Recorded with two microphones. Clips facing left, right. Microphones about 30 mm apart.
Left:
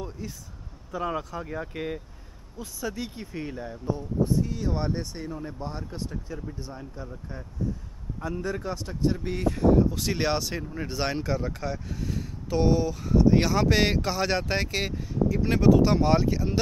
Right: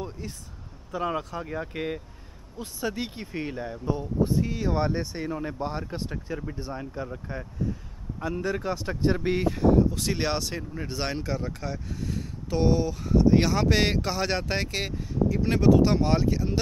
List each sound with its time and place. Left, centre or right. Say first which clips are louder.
0.2 s speech: left 1 dB; right
0.9 s speech: right 1 dB; centre
2.6 s speech: right 2 dB; right
3.8 s speech: right 1 dB; right; by 5.2 s centre
5.2 s speech: right 4 dB; right
8.5 s speech: right 3 dB; right
8.8 s speech: right 3 dB; right
9.5 s speech: left 2 dB; centre